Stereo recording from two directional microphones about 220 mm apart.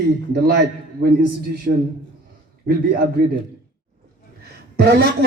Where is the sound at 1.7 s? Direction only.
60° right (ahead or behind).